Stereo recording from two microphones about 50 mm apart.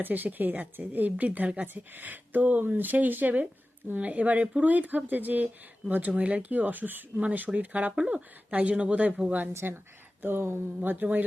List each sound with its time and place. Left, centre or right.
0.0 s speech: right